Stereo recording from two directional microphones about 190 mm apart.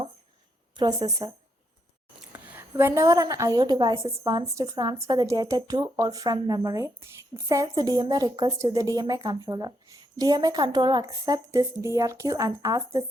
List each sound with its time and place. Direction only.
0.8 s a woman's voice: 20° right (ahead or behind)
2.3 s a woman's voice: 10° right (ahead or behind)